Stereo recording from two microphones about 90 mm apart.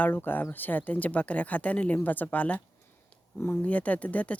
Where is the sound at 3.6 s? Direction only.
15° left (ahead or behind).